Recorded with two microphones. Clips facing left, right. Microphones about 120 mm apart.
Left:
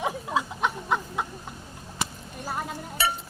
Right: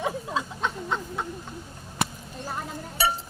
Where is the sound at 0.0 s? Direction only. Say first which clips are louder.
Left 1 dB; 15° left (ahead or behind).